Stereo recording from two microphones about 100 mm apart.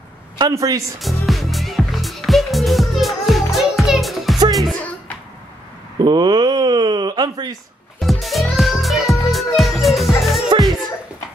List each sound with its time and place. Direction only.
0.4 s speech: 35° right (ahead or behind)
0.9 s music: centre (ahead or behind)
5.9 s a sound: 50° right (ahead or behind)
8.0 s music: centre (ahead or behind)